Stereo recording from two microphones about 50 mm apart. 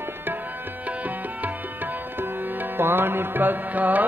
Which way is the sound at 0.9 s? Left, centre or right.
Right.